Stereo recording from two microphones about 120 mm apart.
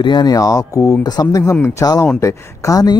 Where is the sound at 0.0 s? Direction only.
35° left (ahead or behind).